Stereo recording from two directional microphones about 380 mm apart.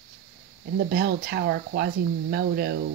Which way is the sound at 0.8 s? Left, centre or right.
Right.